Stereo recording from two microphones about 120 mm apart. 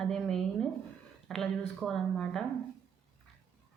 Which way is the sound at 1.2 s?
5° left (ahead or behind).